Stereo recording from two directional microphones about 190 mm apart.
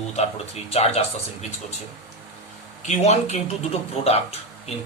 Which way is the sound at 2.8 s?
35° left (ahead or behind).